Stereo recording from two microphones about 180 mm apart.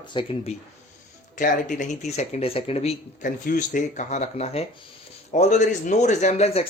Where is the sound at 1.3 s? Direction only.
45° left (ahead or behind).